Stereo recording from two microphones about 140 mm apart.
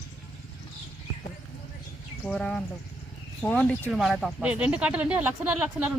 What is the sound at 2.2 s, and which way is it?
Speech, 5° left (ahead or behind).